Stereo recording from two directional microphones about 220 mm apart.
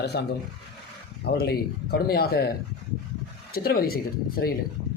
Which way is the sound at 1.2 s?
45° left (ahead or behind).